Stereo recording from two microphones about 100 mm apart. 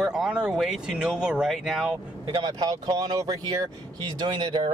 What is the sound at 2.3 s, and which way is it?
A man's voice, 45° right (ahead or behind).